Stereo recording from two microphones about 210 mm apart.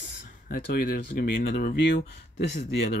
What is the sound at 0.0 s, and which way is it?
Speech, 50° left (ahead or behind).